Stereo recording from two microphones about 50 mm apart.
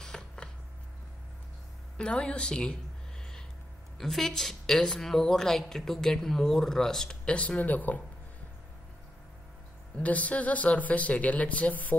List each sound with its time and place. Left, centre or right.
0.0 s a sound: centre
2.0 s speech: centre
4.0 s a woman's voice: centre
7.2 s speech: left
9.9 s speech: left